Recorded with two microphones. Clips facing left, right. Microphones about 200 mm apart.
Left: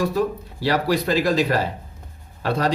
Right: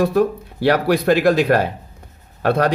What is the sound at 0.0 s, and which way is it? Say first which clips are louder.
Speech: right 5 dB; 60° right (ahead or behind).